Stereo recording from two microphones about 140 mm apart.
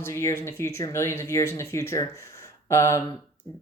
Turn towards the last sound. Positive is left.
turn(degrees=20)  # may be behind; listen again after turning